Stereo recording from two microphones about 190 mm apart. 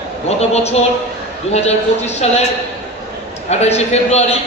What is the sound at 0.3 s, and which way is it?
A man's voice, 35° left (ahead or behind).